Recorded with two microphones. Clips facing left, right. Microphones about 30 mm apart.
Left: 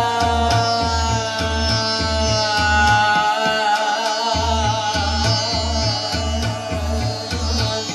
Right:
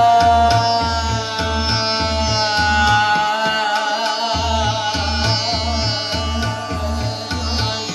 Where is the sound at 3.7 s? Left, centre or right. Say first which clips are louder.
Even; centre.